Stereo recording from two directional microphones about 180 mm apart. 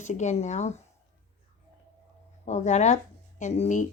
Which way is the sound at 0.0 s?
40° left (ahead or behind).